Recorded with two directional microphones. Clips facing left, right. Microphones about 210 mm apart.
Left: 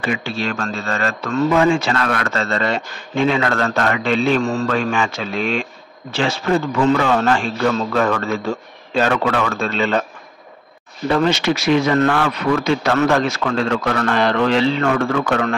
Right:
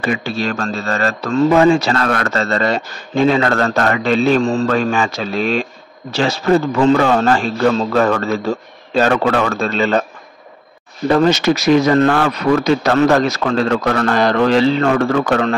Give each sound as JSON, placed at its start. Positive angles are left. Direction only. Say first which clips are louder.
{"t": 0.0, "sound": "speech", "louder": "right 3 dB", "side_deg": -40}
{"t": 11.1, "sound": "speech", "louder": "right 4 dB", "side_deg": -40}